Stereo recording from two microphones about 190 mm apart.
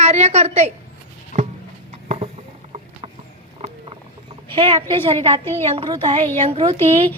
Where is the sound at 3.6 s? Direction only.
30° right (ahead or behind).